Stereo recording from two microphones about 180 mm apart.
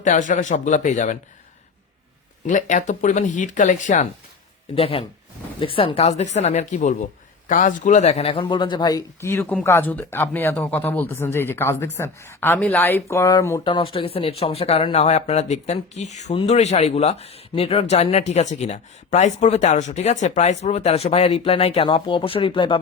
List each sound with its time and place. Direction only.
0.0 s speech: 45° left (ahead or behind)
2.5 s speech: 45° left (ahead or behind)
4.7 s speech: 30° left (ahead or behind); by 9.4 s 15° left (ahead or behind)
9.4 s speech: 5° left (ahead or behind)
13.7 s speech: 30° left (ahead or behind)